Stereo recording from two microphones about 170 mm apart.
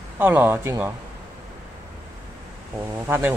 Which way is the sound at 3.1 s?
15° right (ahead or behind).